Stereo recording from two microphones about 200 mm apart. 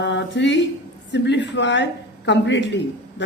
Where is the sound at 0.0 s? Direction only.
60° left (ahead or behind).